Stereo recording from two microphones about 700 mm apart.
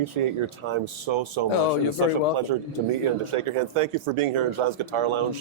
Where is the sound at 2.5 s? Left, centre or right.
Right.